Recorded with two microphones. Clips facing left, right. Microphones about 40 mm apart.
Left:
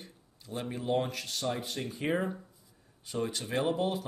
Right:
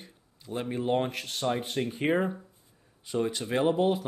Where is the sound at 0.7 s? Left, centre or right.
Right.